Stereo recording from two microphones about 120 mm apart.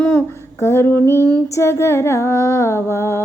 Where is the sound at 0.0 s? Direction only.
20° left (ahead or behind).